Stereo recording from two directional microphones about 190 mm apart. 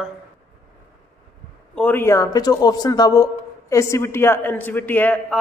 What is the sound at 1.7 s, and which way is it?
A man's voice, 10° left (ahead or behind).